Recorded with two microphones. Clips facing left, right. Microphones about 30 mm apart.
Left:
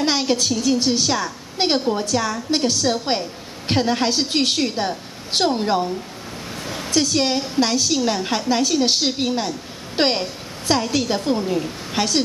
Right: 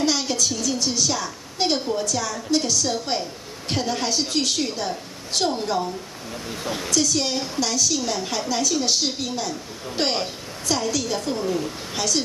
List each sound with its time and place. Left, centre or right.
0.0 s a woman's voice: left
6.5 s a sound: centre
6.9 s a woman's voice: left